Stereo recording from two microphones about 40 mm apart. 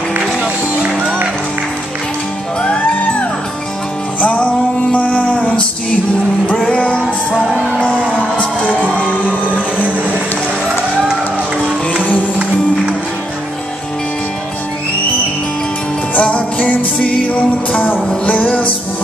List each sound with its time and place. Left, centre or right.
4.2 s music: left
11.0 s music: centre
16.2 s music: left